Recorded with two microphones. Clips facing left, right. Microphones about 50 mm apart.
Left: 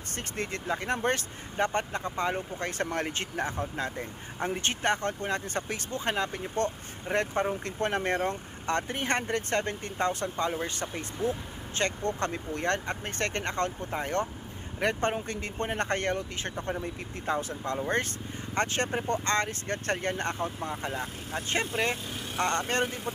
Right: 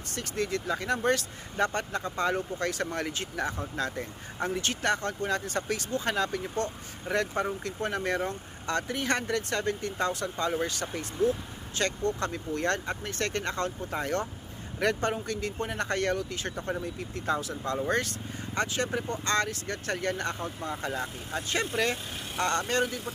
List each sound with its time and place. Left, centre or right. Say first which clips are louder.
0.1 s speech: right 4 dB; left
2.9 s speech: left 1 dB; left
3.6 s speech: even; left
18.5 s speech: left 1 dB; left
19.2 s speech: even; left